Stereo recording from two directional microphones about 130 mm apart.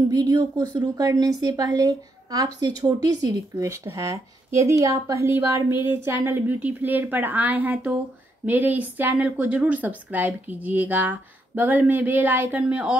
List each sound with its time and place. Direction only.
0.1 s a woman's voice: 30° right (ahead or behind); by 12.9 s 10° right (ahead or behind)